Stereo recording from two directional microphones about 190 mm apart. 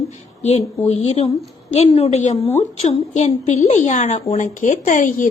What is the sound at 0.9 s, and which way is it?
Speech, 30° left (ahead or behind).